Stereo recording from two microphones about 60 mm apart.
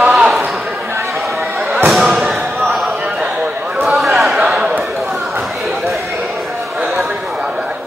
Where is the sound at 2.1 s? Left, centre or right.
Centre.